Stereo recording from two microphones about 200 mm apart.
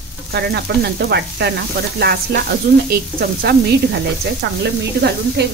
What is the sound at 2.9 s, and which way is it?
Speech, 50° right (ahead or behind).